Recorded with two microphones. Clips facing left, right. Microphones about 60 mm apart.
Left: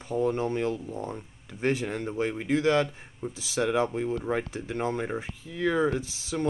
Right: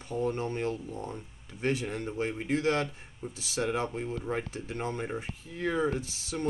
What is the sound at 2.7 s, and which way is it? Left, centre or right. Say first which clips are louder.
Speech: left 5 dB; left.